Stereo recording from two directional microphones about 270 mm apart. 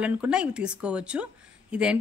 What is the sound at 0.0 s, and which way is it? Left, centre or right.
Speech, centre.